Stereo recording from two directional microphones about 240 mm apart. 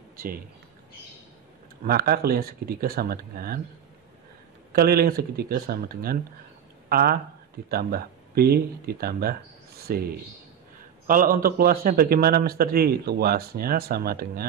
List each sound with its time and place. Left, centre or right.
1.9 s a man's voice: right
4.7 s a man's voice: right
11.1 s a man's voice: right